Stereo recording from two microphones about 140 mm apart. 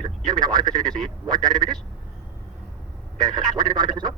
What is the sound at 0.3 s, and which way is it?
Speech, 30° right (ahead or behind).